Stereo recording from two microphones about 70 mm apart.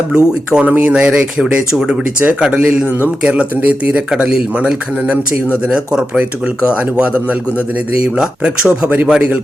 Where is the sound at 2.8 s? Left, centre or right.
Right.